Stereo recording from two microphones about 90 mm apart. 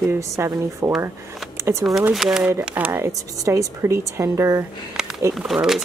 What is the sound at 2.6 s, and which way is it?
Speech, 20° right (ahead or behind).